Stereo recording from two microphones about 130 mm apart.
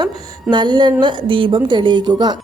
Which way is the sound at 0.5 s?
35° right (ahead or behind).